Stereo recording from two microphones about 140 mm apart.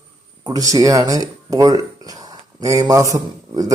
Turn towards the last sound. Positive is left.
turn(degrees=-25)  # may be behind; listen again after turning